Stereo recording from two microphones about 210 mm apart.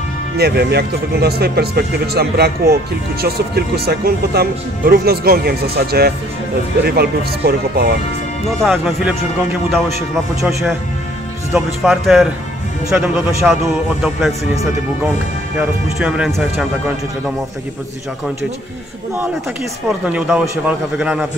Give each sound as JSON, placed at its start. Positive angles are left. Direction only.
{"t": 0.4, "sound": "speech", "side_deg": -50}
{"t": 8.5, "sound": "speech", "side_deg": 0}
{"t": 15.6, "sound": "speech", "side_deg": -5}
{"t": 20.1, "sound": "speech", "side_deg": -5}